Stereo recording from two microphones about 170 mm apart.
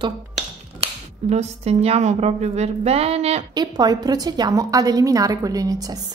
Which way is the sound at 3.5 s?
25° right (ahead or behind).